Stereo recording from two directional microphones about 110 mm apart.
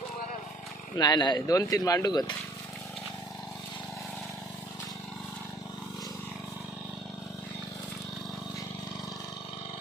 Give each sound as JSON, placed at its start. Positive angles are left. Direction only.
{"t": 0.9, "sound": "speech", "side_deg": 40}